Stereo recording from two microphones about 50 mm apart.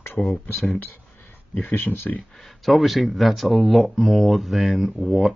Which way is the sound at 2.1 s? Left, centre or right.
Left.